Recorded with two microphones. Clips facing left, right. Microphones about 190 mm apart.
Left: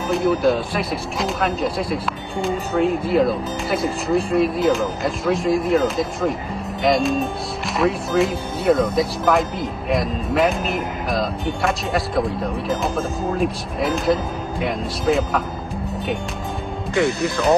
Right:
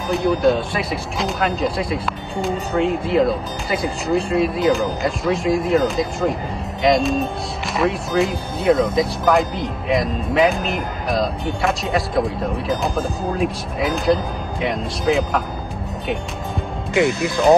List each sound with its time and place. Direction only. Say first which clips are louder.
0.1 s speech: right 1 dB; centre (ahead or behind)
16.9 s speech: right 2 dB; 15° right (ahead or behind)